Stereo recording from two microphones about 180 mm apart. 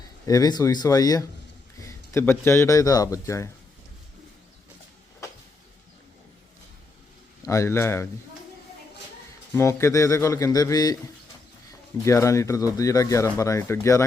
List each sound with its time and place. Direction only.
0.3 s speech: 20° left (ahead or behind)
5.2 s vehicle: 15° left (ahead or behind)
7.4 s speech: 15° left (ahead or behind)
9.6 s speech: 15° left (ahead or behind)
12.0 s speech: 15° left (ahead or behind)